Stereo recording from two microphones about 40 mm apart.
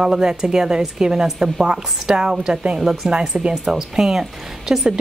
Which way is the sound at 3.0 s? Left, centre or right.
Centre.